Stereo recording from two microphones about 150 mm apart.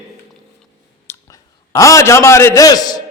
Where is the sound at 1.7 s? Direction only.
20° left (ahead or behind).